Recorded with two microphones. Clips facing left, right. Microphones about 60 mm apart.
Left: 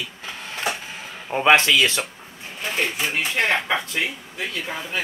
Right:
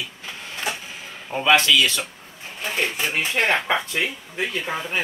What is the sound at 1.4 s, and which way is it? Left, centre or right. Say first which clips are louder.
Speech: left 1 dB; left.